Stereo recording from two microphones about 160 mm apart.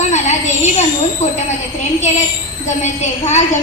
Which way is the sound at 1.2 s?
50° left (ahead or behind).